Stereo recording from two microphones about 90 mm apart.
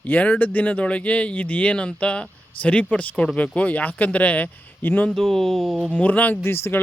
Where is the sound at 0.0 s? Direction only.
15° left (ahead or behind).